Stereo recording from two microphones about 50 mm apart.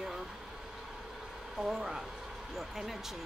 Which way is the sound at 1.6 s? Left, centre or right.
Centre.